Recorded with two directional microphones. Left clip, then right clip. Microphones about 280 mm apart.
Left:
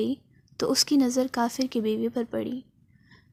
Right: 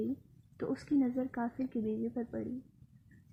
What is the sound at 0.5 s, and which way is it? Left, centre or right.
A woman's voice, left.